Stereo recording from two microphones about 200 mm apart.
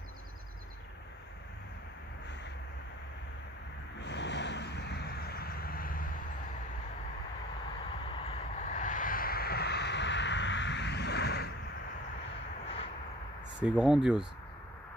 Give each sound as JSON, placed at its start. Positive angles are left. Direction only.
{"t": 4.0, "sound": "vehicle", "side_deg": 60}
{"t": 8.0, "sound": "vehicle", "side_deg": 25}
{"t": 13.6, "sound": "speech", "side_deg": -5}